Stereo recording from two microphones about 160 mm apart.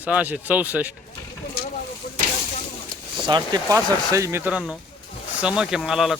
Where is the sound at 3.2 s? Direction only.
25° right (ahead or behind); by 6.1 s centre (ahead or behind).